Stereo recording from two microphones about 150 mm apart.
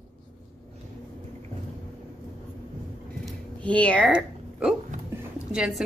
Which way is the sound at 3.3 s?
10° left (ahead or behind).